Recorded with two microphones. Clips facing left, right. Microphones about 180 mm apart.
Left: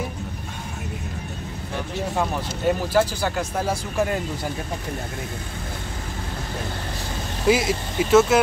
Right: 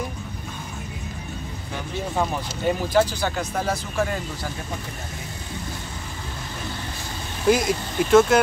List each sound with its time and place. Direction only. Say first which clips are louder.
2.1 s speech: right 1 dB; 5° left (ahead or behind)
7.4 s speech: even; 5° left (ahead or behind)